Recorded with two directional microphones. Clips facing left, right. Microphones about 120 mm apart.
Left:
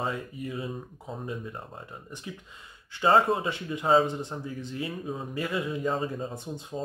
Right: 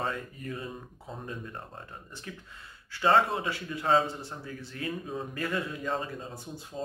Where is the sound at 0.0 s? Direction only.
15° left (ahead or behind).